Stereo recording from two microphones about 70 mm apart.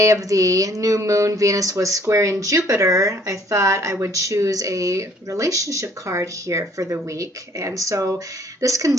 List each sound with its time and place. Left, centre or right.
0.0 s speech: right